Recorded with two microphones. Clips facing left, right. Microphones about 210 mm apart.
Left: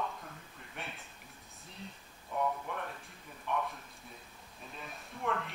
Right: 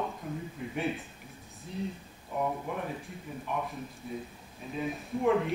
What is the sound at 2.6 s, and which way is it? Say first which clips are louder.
A man's voice: right 6 dB; 5° right (ahead or behind).